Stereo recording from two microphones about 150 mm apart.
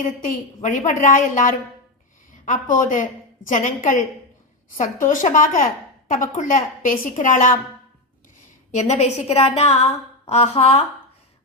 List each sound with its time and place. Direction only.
0.0 s a woman's voice: 60° left (ahead or behind)
8.7 s a woman's voice: 45° left (ahead or behind)